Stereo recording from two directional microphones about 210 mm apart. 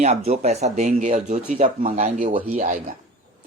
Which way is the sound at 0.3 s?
30° right (ahead or behind).